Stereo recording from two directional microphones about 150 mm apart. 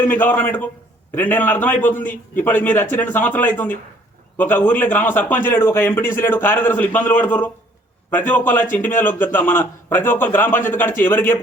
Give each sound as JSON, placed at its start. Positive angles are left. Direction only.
{"t": 0.0, "sound": "a man's voice", "side_deg": 10}